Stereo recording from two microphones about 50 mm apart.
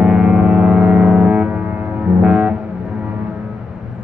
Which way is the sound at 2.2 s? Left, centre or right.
Centre.